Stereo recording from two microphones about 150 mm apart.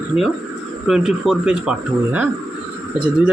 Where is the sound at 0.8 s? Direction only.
Centre (ahead or behind).